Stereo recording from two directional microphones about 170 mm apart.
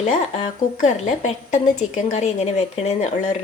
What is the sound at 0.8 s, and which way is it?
A woman's voice, 45° left (ahead or behind).